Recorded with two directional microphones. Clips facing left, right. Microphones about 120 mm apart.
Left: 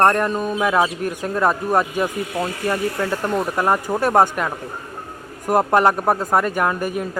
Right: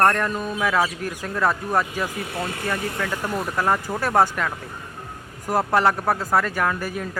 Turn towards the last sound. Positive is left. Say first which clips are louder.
# left 4 dB
turn(degrees=20)  # may be behind; listen again after turning